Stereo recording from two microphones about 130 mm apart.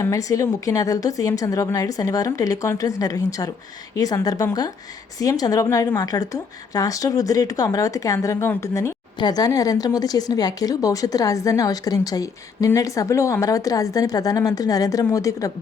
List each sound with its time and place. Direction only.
0.0 s speech: 25° left (ahead or behind)